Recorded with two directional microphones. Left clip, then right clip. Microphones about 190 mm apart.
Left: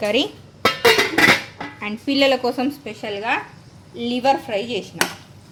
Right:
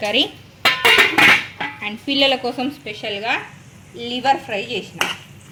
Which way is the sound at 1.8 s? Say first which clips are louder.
Even; 15° left (ahead or behind).